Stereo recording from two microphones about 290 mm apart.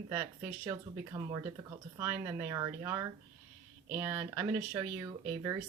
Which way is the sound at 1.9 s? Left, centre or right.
Centre.